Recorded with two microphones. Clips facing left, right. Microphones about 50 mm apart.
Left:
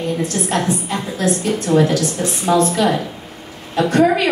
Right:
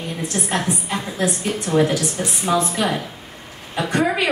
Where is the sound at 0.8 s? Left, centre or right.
Centre.